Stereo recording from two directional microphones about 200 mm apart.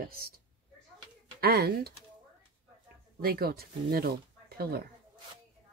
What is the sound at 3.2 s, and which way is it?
Speech, 50° right (ahead or behind).